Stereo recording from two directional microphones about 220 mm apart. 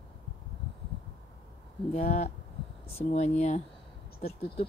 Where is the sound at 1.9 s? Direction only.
30° left (ahead or behind).